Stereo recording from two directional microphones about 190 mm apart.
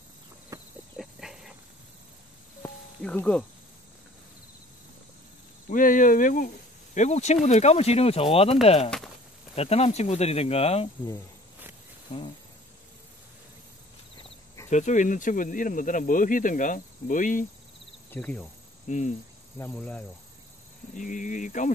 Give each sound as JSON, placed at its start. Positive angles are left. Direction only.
{"t": 0.5, "sound": "clip-clop", "side_deg": -15}
{"t": 0.9, "sound": "dog", "side_deg": 0}
{"t": 2.6, "sound": "music", "side_deg": 10}
{"t": 5.7, "sound": "speech", "side_deg": 45}
{"t": 12.1, "sound": "speech", "side_deg": 40}
{"t": 14.7, "sound": "speech", "side_deg": 40}
{"t": 18.1, "sound": "speech", "side_deg": 5}
{"t": 18.9, "sound": "speech", "side_deg": 40}
{"t": 19.6, "sound": "speech", "side_deg": 10}
{"t": 20.9, "sound": "speech", "side_deg": 40}